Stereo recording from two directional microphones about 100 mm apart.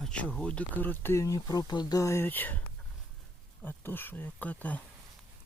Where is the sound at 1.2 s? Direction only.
35° left (ahead or behind); by 2.6 s 20° left (ahead or behind).